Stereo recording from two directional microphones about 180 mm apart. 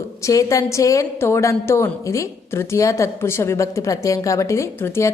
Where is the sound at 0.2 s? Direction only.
20° left (ahead or behind).